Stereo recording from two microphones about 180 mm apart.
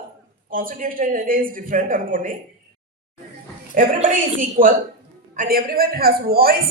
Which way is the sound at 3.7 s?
45° right (ahead or behind).